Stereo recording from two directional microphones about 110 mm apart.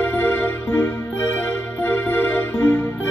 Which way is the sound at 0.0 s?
20° left (ahead or behind).